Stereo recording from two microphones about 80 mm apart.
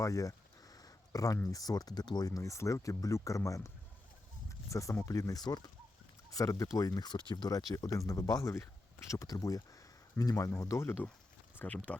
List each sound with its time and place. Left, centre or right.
0.0 s a sound: left
1.5 s speech: left
4.7 s speech: left
6.3 s speech: left
7.5 s speech: left
11.5 s speech: left